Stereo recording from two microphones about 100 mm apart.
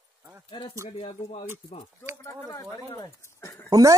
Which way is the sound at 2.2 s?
30° left (ahead or behind).